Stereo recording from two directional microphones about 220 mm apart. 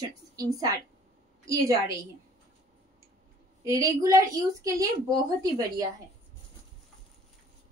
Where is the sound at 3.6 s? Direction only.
15° right (ahead or behind).